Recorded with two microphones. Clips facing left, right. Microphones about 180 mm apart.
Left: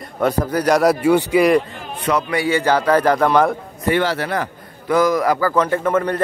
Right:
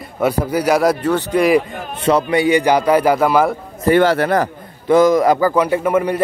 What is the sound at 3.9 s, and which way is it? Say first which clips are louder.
Speech: right 6 dB; 50° right (ahead or behind).